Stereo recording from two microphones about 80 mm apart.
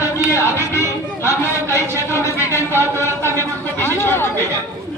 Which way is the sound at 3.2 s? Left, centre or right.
Left.